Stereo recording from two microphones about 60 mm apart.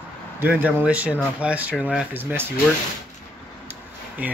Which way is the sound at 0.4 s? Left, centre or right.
Right.